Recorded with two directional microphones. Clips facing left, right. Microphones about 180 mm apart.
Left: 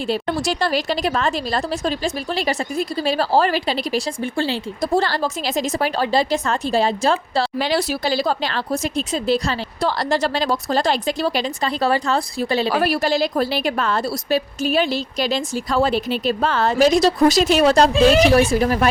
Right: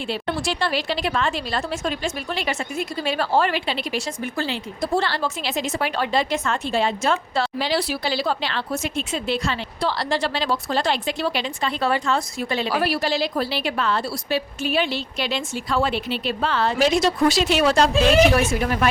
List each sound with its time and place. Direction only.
0.1 s speech: 40° left (ahead or behind)
7.6 s speech: 45° left (ahead or behind)